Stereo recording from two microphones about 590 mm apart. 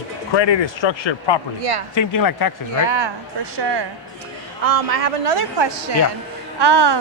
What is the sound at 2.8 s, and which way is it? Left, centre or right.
A woman's voice, right.